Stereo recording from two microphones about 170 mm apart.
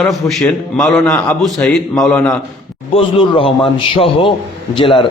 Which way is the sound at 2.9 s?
30° left (ahead or behind).